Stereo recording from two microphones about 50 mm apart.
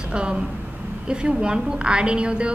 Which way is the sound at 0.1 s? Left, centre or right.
Centre.